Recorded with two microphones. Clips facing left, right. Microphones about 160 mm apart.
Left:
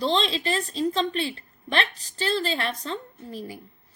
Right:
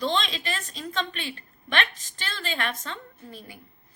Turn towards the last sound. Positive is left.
turn(degrees=35)  # may be behind; listen again after turning